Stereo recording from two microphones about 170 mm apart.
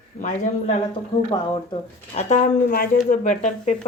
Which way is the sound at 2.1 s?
45° left (ahead or behind).